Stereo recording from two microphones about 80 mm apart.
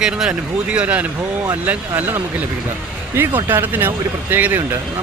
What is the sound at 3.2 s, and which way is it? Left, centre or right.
Speech, right.